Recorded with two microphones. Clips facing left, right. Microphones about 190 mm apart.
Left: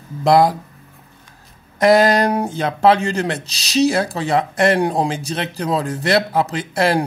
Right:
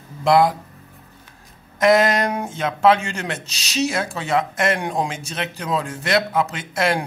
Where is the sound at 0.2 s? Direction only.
35° left (ahead or behind).